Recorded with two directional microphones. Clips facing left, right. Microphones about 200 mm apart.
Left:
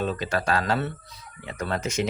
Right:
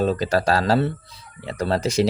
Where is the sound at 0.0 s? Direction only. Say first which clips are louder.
Right 6 dB; 35° right (ahead or behind).